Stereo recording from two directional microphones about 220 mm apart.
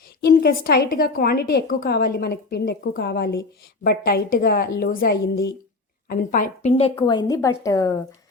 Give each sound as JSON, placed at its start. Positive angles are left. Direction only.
{"t": 0.2, "sound": "a woman's voice", "side_deg": 45}